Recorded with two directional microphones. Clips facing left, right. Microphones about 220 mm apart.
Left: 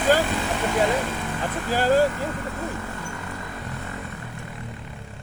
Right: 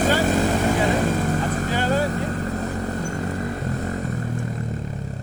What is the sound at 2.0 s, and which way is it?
Vehicle, 40° right (ahead or behind).